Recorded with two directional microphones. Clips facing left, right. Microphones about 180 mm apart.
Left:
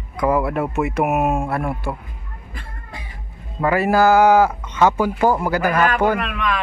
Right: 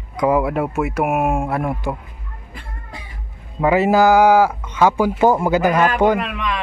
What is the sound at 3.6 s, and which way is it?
Speech, 20° right (ahead or behind).